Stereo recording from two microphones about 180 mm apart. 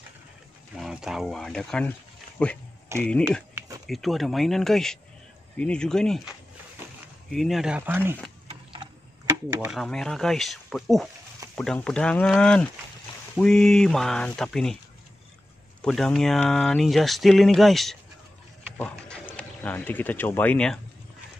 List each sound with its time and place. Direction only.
0.7 s speech: centre (ahead or behind)
3.5 s a sound: 15° right (ahead or behind)
3.8 s speech: centre (ahead or behind)
7.3 s speech: centre (ahead or behind)
9.6 s speech: centre (ahead or behind)
15.8 s speech: centre (ahead or behind)